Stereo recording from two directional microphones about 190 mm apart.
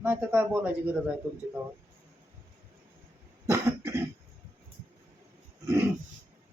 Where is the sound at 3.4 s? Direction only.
15° right (ahead or behind).